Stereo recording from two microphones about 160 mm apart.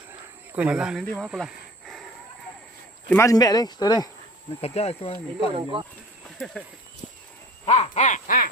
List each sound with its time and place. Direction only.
0.1 s a sound: 10° right (ahead or behind)
1.2 s snake: centre (ahead or behind)
3.1 s speech: 20° left (ahead or behind)
4.6 s speech: 40° left (ahead or behind)
7.6 s crow: 40° left (ahead or behind)